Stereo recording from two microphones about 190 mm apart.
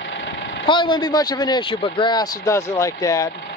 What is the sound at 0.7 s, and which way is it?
Speech, 25° left (ahead or behind).